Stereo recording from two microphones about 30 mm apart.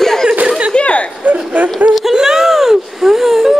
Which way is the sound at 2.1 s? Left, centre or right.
Centre.